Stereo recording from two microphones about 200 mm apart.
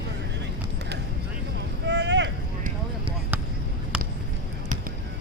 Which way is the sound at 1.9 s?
60° right (ahead or behind).